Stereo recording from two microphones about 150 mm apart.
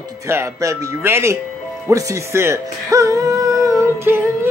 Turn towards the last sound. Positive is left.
turn(degrees=-15)  # may be behind; listen again after turning